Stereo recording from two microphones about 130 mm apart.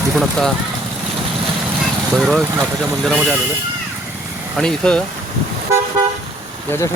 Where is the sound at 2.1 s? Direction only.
5° right (ahead or behind).